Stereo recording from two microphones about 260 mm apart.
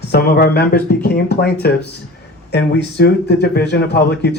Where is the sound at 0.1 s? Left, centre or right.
Left.